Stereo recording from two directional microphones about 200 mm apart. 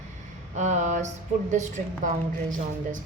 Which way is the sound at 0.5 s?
35° right (ahead or behind).